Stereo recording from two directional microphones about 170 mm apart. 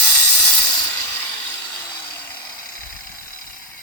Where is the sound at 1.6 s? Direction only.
20° left (ahead or behind).